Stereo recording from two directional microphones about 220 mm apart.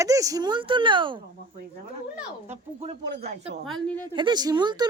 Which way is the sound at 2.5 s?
30° right (ahead or behind).